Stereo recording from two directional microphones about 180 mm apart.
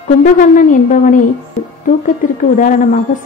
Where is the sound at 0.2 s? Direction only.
45° left (ahead or behind).